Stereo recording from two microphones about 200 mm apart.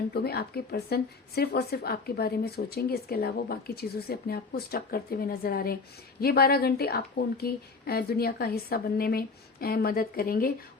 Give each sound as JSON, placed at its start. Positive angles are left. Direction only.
{"t": 0.1, "sound": "speech", "side_deg": 50}